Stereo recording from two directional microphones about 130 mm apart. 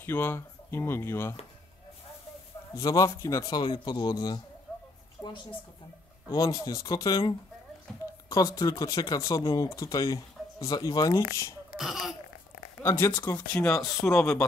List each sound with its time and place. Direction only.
0.0 s speech: 15° left (ahead or behind)
2.7 s speech: 25° left (ahead or behind)
5.2 s a sound: 10° left (ahead or behind)
6.3 s speech: 30° left (ahead or behind)
11.7 s speech: centre (ahead or behind)
12.8 s speech: 20° left (ahead or behind)